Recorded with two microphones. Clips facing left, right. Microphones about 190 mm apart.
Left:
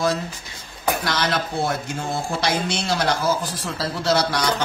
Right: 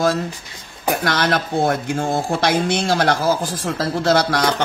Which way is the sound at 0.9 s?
55° right (ahead or behind).